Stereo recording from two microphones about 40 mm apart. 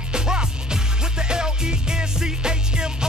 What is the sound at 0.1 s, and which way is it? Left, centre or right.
Music, centre.